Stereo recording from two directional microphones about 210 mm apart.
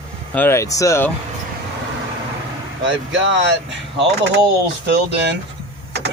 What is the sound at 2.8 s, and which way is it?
Speech, 60° right (ahead or behind).